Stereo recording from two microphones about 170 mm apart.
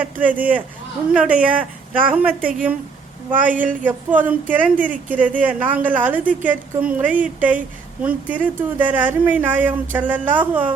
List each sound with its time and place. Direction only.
0.0 s speech: 10° right (ahead or behind)
2.4 s a woman's voice: 55° right (ahead or behind)
3.2 s speech: 10° right (ahead or behind)